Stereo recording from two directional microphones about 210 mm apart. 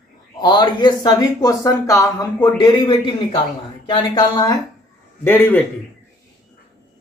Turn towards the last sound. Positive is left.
turn(degrees=10)  # may be behind; listen again after turning